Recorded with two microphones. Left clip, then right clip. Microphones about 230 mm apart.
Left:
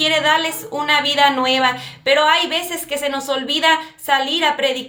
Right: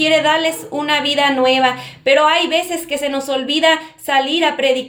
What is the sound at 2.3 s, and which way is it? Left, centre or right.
Speech, left.